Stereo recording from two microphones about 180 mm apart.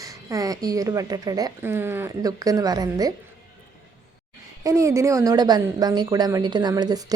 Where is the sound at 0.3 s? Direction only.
20° right (ahead or behind).